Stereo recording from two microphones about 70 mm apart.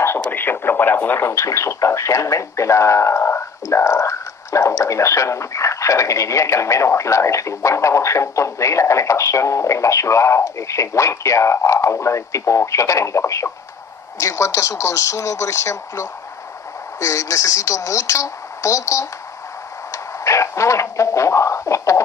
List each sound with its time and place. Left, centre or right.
0.2 s radio: left
1.3 s speech: left
19.9 s a sound: left